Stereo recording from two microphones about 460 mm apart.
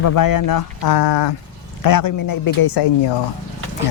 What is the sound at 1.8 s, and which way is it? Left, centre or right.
Speech, left.